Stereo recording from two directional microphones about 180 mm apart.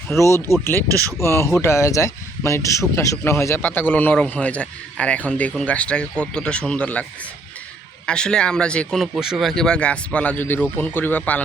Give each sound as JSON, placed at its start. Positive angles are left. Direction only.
{"t": 0.2, "sound": "speech", "side_deg": 15}
{"t": 8.0, "sound": "speech", "side_deg": 5}